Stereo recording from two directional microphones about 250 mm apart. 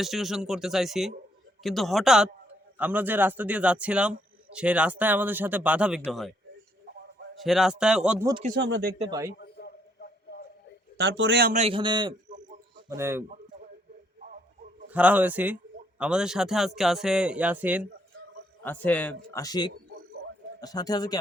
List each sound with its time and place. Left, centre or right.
0.0 s a man's voice: centre
7.3 s a man's voice: centre
8.5 s speech: right
9.0 s a man's voice: centre
9.4 s a sound: left
10.9 s a man's voice: right; by 13.2 s centre
14.8 s a man's voice: centre
18.6 s speech: centre
20.2 s a sound: right
20.6 s speech: centre